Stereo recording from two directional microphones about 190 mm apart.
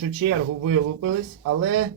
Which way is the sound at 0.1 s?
90° right.